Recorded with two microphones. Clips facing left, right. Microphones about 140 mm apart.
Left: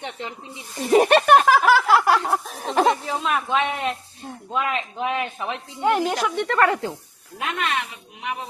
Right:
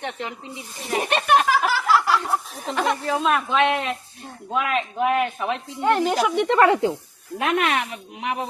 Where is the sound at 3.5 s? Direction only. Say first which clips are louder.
Right 4 dB; 85° right.